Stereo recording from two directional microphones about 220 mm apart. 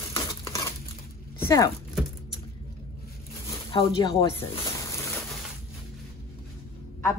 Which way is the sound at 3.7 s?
20° left (ahead or behind).